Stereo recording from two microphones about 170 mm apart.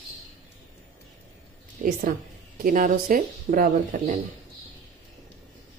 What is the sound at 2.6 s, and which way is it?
Speech, 55° right (ahead or behind).